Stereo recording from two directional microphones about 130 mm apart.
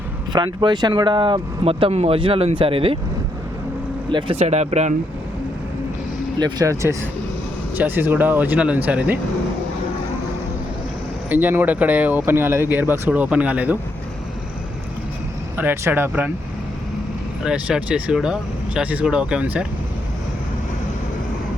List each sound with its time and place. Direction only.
0.3 s speech: 35° right (ahead or behind)
4.1 s speech: 50° right (ahead or behind)
6.4 s speech: 25° right (ahead or behind)
7.8 s speech: 15° right (ahead or behind)
11.3 s speech: 15° right (ahead or behind)
15.5 s speech: 20° right (ahead or behind)
17.4 s speech: 5° right (ahead or behind)